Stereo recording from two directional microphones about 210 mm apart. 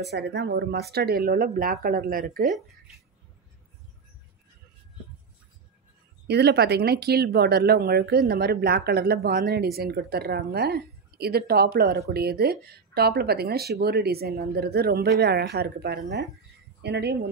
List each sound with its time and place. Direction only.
0.1 s speech: 55° right (ahead or behind)
6.2 s speech: 50° right (ahead or behind)